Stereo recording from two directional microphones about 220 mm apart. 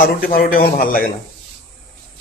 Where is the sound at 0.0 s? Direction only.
40° left (ahead or behind).